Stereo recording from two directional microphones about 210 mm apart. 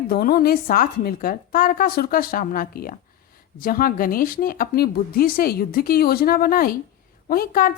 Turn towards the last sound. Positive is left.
turn(degrees=45)  # may be behind; listen again after turning